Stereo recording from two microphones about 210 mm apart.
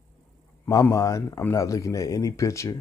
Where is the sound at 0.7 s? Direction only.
15° left (ahead or behind).